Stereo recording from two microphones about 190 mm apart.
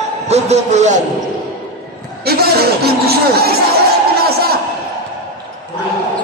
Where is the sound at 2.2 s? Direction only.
55° right (ahead or behind).